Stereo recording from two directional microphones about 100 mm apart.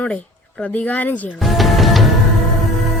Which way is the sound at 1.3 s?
Centre (ahead or behind).